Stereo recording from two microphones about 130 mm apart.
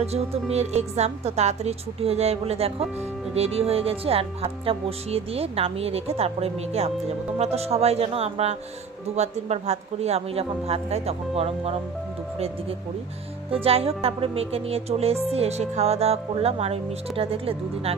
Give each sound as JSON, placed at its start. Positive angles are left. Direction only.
{"t": 0.0, "sound": "speech", "side_deg": -55}
{"t": 13.5, "sound": "speech", "side_deg": -50}